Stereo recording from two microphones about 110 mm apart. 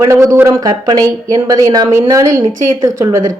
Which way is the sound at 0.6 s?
35° right (ahead or behind).